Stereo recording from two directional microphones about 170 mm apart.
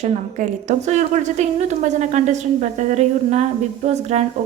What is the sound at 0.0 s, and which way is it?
A woman's voice, 45° right (ahead or behind).